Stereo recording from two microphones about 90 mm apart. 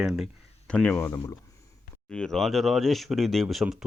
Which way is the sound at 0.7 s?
10° left (ahead or behind).